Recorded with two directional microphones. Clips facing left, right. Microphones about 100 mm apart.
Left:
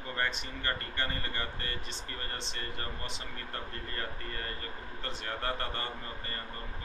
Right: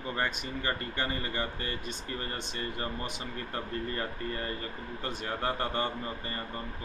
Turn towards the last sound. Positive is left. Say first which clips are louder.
# right 5 dB
turn(degrees=-20)  # may be behind; listen again after turning